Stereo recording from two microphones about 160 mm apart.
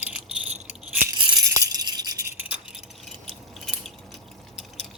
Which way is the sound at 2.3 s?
10° right (ahead or behind).